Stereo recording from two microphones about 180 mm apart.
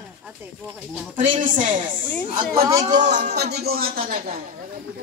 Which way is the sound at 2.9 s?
40° right (ahead or behind).